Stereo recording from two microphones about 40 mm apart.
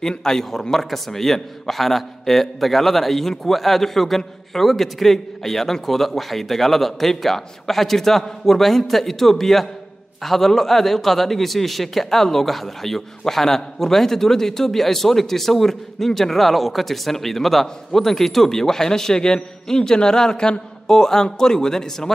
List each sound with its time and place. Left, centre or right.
0.2 s a man's voice: centre